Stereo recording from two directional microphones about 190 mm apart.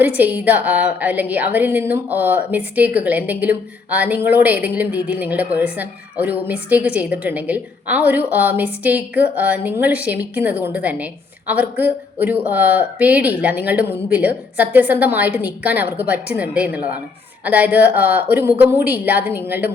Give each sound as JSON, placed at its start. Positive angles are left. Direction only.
{"t": 0.0, "sound": "a woman's voice", "side_deg": -10}